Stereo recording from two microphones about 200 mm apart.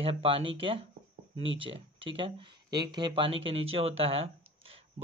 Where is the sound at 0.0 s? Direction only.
30° right (ahead or behind).